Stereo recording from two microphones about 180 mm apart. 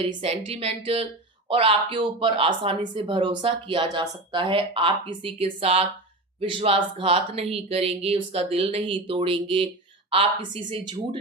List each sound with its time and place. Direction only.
0.2 s a woman's voice: 35° right (ahead or behind)